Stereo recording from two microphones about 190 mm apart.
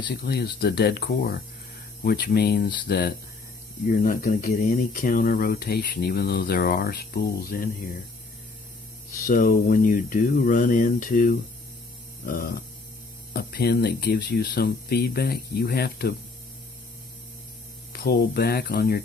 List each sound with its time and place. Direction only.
0.1 s speech: 55° left (ahead or behind)
3.8 s speech: 50° left (ahead or behind)
9.2 s speech: 45° left (ahead or behind)
17.9 s speech: 55° left (ahead or behind)